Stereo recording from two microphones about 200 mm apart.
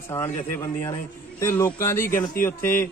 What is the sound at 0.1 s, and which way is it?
A man's voice, 15° left (ahead or behind).